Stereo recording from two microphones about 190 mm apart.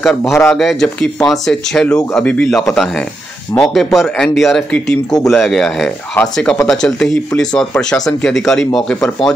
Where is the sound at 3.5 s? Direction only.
Centre (ahead or behind).